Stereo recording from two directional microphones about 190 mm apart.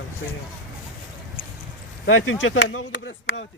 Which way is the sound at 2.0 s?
90° left.